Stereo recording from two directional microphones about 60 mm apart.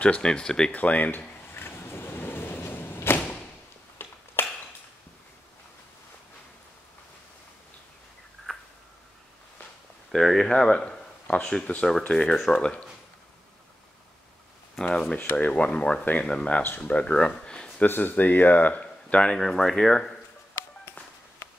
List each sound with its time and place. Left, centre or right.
0.0 s speech: centre
0.7 s speech: left
1.5 s arrow: left
4.0 s a sound: left
8.5 s a sound: centre
10.1 s speech: centre
14.8 s speech: centre
15.3 s speech: left
17.8 s speech: left
19.3 s speech: centre